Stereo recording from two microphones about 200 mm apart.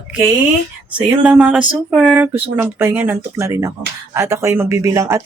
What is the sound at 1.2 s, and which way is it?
Speech, 5° right (ahead or behind).